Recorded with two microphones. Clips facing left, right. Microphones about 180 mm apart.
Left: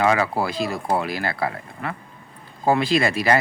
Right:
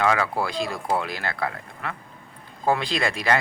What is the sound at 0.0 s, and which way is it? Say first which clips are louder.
Speech: left 3 dB; 5° left (ahead or behind).